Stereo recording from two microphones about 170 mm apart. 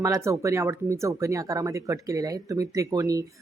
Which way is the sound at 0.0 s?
20° right (ahead or behind).